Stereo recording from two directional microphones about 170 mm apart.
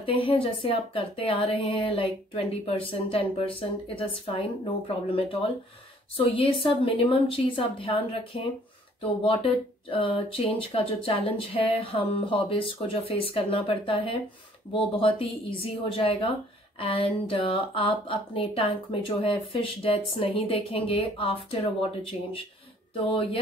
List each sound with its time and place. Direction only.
0.0 s speech: 35° left (ahead or behind)
22.9 s speech: 35° left (ahead or behind)